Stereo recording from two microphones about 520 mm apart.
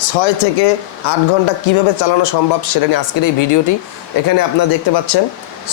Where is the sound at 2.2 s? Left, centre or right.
Left.